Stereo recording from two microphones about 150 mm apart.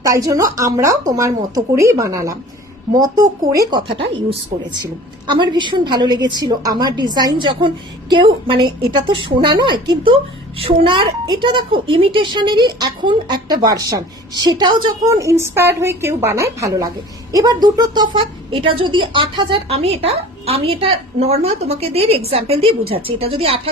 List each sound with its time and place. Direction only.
0.0 s a woman's voice: 20° right (ahead or behind)
3.9 s a woman's voice: 35° right (ahead or behind)